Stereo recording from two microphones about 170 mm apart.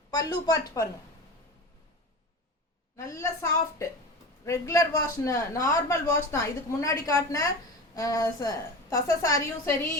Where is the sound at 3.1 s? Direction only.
20° left (ahead or behind).